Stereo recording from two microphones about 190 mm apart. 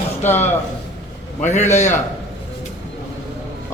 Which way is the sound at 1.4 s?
35° left (ahead or behind).